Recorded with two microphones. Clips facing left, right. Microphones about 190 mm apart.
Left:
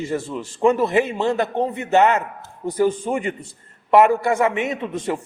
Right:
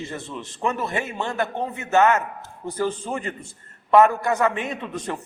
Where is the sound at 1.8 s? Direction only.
15° left (ahead or behind).